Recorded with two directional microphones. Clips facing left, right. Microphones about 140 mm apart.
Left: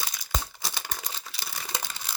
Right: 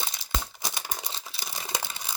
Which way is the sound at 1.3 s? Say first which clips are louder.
Right 2 dB; 20° right (ahead or behind).